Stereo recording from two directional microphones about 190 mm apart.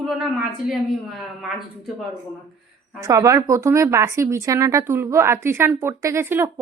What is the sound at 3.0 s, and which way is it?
Speech, 15° right (ahead or behind).